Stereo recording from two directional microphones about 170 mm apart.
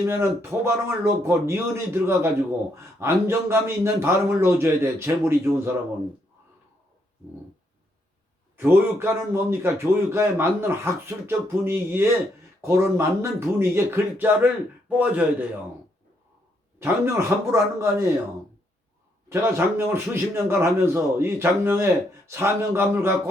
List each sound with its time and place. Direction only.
0.0 s a man's voice: 15° right (ahead or behind)
8.5 s a man's voice: 15° right (ahead or behind)
16.8 s a man's voice: 15° right (ahead or behind)
19.3 s a man's voice: 15° right (ahead or behind)